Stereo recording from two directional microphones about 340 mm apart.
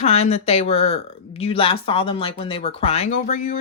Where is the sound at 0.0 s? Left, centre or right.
Centre.